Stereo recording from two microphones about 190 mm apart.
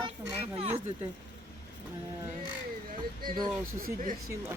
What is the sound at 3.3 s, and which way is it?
Speech, 20° right (ahead or behind).